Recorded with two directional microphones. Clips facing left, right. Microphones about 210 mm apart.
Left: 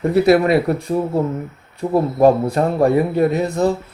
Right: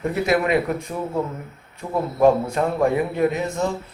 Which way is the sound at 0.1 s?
35° left (ahead or behind).